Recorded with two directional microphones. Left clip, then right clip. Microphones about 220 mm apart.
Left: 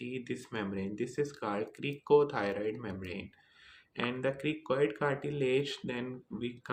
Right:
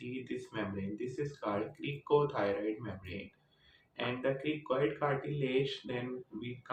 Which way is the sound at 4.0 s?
55° left (ahead or behind).